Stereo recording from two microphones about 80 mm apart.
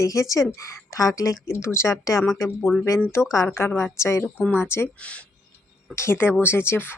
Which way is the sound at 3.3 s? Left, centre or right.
Left.